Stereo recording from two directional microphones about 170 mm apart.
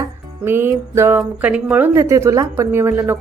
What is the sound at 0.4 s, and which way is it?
A woman's voice, 15° right (ahead or behind).